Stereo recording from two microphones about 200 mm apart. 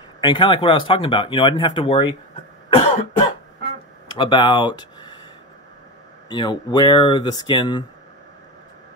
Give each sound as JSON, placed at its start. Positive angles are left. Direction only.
{"t": 0.2, "sound": "speech", "side_deg": 25}
{"t": 2.7, "sound": "cough", "side_deg": 30}
{"t": 4.2, "sound": "speech", "side_deg": 25}
{"t": 6.2, "sound": "speech", "side_deg": 20}